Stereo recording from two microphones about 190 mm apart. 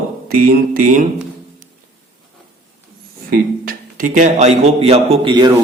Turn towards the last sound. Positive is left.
turn(degrees=-25)  # may be behind; listen again after turning